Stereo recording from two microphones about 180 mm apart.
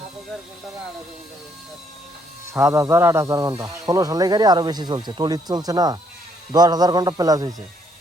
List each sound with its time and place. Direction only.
2.5 s speech: 15° right (ahead or behind)